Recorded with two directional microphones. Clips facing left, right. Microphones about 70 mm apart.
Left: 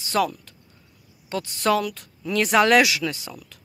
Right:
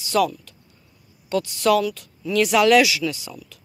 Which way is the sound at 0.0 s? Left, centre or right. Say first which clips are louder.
Right 3 dB; left.